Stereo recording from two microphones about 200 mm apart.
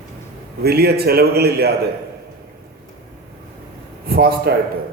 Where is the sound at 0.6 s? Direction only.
55° right (ahead or behind).